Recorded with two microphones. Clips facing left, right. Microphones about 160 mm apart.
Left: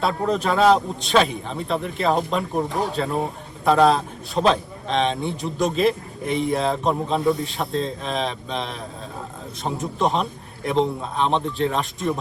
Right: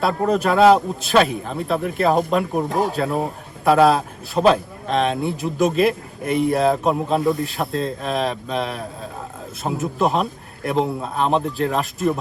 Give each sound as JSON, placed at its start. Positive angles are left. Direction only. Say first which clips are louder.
{"t": 0.0, "sound": "a man's voice", "louder": "right 3 dB", "side_deg": -5}